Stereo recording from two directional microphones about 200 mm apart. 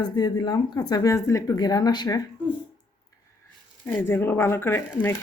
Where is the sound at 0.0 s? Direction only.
20° left (ahead or behind).